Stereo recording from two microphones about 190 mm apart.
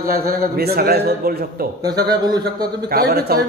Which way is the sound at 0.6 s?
55° right (ahead or behind).